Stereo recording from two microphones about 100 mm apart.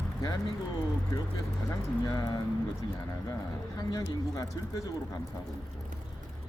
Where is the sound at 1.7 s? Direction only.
35° left (ahead or behind).